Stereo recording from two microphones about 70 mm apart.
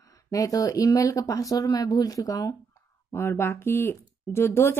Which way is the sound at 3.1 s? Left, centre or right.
Left.